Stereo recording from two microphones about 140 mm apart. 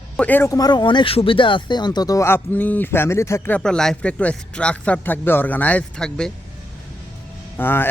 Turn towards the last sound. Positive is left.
turn(degrees=15)  # may be behind; listen again after turning